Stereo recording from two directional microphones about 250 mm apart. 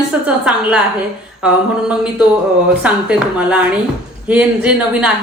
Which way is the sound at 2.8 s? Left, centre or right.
Centre.